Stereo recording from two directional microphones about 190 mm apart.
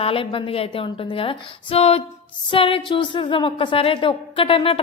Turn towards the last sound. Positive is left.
turn(degrees=30)  # may be behind; listen again after turning